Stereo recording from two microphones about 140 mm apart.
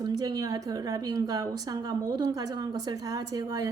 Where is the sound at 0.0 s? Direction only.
30° right (ahead or behind).